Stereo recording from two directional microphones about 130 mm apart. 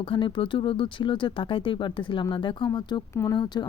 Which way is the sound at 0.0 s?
40° left (ahead or behind).